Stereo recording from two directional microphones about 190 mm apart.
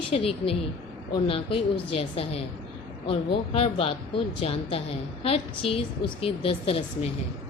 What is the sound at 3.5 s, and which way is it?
A woman's voice, 30° left (ahead or behind).